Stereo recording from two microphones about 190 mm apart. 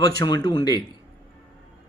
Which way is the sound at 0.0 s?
20° left (ahead or behind).